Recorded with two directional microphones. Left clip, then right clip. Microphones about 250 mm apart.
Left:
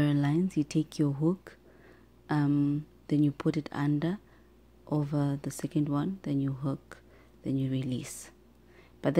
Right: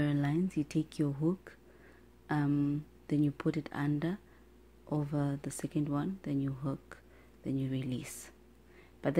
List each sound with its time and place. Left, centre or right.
0.0 s speech: centre